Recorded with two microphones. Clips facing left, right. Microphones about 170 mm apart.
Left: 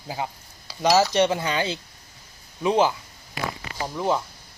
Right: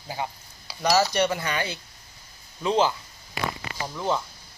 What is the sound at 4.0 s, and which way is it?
Speech, 10° left (ahead or behind).